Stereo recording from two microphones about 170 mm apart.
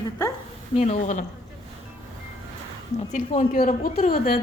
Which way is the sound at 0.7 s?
40° left (ahead or behind).